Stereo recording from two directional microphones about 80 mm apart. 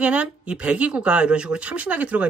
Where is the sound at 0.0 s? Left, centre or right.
Centre.